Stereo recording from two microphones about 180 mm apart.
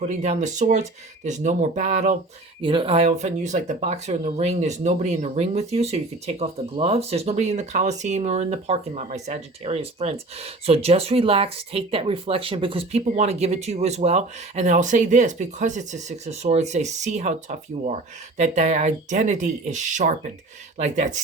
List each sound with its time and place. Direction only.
0.0 s speech: 40° right (ahead or behind)
2.6 s speech: 30° right (ahead or behind)